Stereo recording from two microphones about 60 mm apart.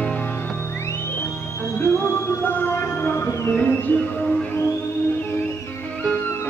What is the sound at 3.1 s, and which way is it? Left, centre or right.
Music, left.